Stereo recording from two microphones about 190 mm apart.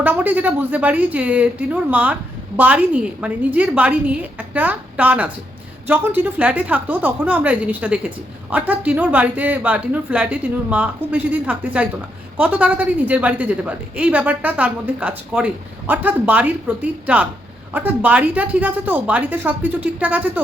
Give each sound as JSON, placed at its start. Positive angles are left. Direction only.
{"t": 0.0, "sound": "speech", "side_deg": -10}